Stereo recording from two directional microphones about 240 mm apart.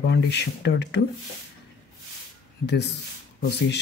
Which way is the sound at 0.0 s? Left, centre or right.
Left.